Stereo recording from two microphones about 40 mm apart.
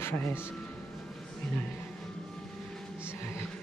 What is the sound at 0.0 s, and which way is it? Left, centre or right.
Speech, left.